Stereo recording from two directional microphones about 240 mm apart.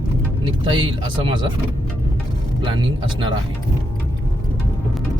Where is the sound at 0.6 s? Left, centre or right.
Right.